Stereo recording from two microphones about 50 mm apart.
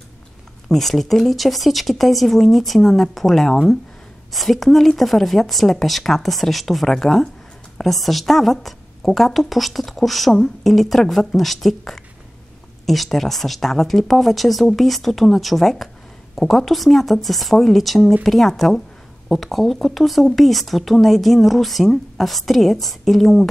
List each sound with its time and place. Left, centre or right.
0.7 s speech: centre